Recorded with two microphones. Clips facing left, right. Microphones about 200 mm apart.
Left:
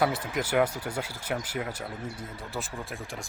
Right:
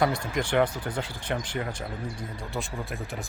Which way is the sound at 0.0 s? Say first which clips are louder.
Right 1 dB; 5° left (ahead or behind).